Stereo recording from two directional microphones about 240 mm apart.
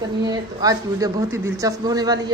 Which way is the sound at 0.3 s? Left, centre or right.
Centre.